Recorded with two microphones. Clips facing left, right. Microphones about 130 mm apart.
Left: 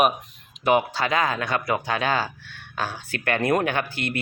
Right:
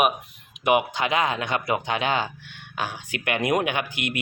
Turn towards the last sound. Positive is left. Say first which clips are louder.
# left 1 dB
turn(degrees=-15)  # may be behind; listen again after turning